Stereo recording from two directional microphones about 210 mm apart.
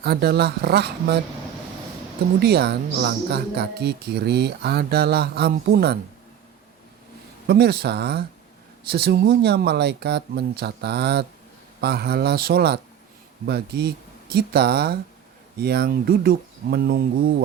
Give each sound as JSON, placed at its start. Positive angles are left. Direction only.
{"t": 0.0, "sound": "speech", "side_deg": -50}
{"t": 2.4, "sound": "speech", "side_deg": -50}
{"t": 7.4, "sound": "speech", "side_deg": -50}